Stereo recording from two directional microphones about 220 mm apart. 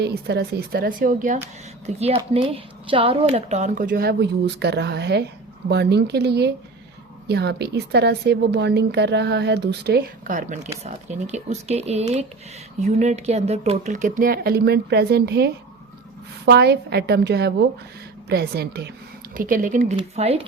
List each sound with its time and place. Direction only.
0.0 s a woman's voice: 50° right (ahead or behind)
2.0 s a woman's voice: 25° right (ahead or behind)